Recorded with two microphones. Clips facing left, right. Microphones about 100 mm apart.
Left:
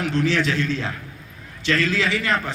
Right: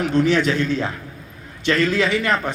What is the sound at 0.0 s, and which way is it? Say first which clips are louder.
A man's voice: right 4 dB; 20° right (ahead or behind).